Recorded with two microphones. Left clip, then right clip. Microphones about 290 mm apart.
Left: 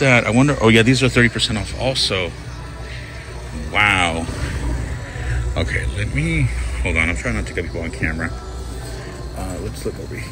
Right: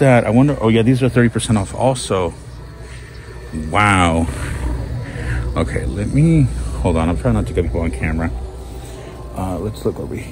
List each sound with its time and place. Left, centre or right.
0.0 s speech: centre
3.7 s speech: right
5.2 s speech: right
7.1 s speech: right
7.5 s speech: right